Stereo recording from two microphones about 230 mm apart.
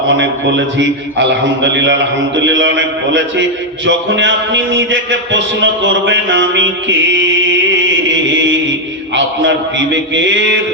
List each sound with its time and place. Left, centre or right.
0.2 s a man's voice: right
9.1 s a man's voice: right